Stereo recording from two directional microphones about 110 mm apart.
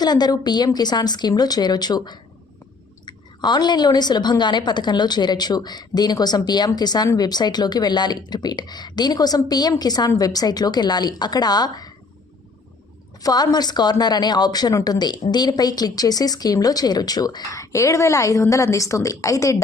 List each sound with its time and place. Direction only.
0.0 s speech: 40° left (ahead or behind)
13.2 s speech: 40° left (ahead or behind)